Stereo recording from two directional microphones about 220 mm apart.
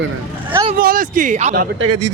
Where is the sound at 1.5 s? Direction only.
45° right (ahead or behind).